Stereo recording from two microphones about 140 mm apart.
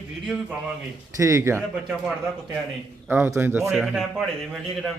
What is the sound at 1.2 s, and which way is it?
Speech, 20° right (ahead or behind).